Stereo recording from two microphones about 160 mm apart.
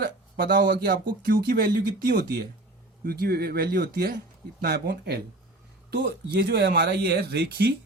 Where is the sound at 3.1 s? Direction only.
75° right (ahead or behind).